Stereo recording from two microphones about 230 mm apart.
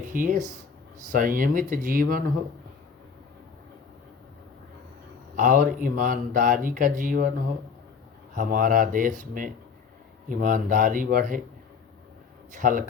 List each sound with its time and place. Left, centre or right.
0.1 s speech: right
5.4 s speech: right
8.4 s speech: right
12.5 s speech: right